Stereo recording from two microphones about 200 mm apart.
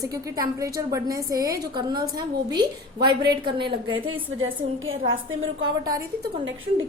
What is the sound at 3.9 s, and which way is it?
A woman's voice, 85° right.